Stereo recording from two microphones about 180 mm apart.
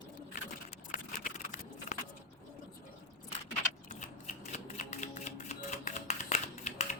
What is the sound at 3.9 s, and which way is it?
Shuffling cards, 45° left (ahead or behind).